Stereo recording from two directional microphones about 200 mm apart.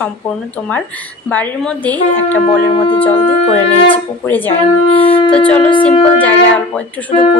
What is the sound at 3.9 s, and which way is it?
A woman's voice, 10° left (ahead or behind).